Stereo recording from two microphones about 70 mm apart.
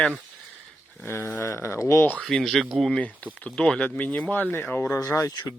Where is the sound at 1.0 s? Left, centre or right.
Left.